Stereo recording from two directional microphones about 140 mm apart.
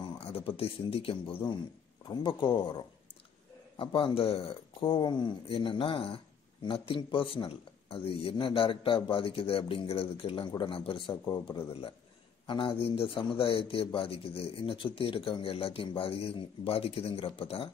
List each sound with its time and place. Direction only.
0.0 s speech: 40° left (ahead or behind)
2.0 s speech: 30° left (ahead or behind)
3.7 s speech: 40° left (ahead or behind)